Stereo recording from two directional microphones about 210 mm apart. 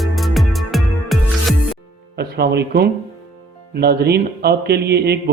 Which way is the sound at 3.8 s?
50° right (ahead or behind).